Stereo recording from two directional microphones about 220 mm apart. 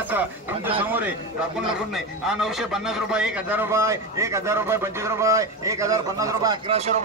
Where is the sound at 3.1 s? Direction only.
5° right (ahead or behind).